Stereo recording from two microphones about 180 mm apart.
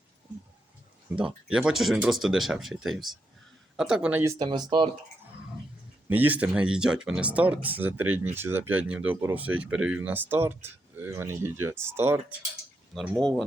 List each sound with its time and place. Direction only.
1.1 s speech: 5° right (ahead or behind); by 4.9 s 25° right (ahead or behind)
6.1 s speech: 10° right (ahead or behind)
12.9 s speech: 5° left (ahead or behind)